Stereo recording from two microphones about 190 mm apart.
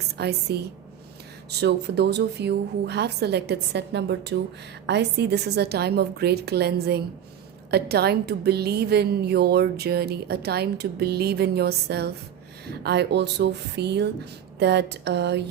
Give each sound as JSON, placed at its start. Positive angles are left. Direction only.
{"t": 0.2, "sound": "a woman's voice", "side_deg": -60}